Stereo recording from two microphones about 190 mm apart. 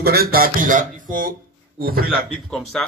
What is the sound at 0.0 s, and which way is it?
Speech, 55° right (ahead or behind).